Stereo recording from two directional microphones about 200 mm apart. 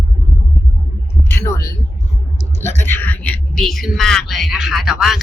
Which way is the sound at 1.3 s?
15° left (ahead or behind).